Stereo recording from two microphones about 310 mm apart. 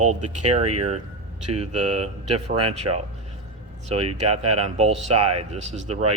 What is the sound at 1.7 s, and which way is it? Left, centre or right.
A man's voice, centre.